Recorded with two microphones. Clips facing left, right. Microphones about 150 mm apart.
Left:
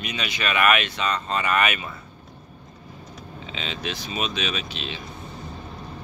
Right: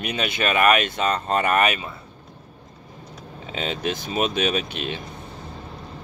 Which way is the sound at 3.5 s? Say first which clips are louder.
Right 6 dB; 45° right (ahead or behind).